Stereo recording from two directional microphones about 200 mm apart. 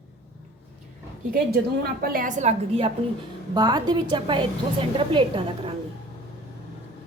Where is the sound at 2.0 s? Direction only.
45° right (ahead or behind).